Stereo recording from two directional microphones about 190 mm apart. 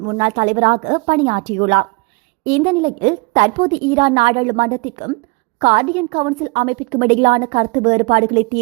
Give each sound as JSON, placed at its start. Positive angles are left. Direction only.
{"t": 0.0, "sound": "a woman's voice", "side_deg": -35}